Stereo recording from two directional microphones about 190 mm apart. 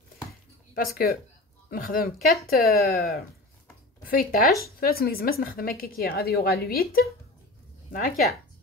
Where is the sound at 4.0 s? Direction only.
50° left (ahead or behind).